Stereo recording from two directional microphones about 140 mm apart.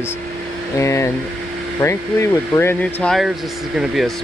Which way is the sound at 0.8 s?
20° left (ahead or behind).